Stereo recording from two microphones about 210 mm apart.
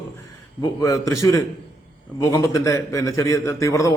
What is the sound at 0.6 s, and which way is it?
A man's voice, 15° left (ahead or behind).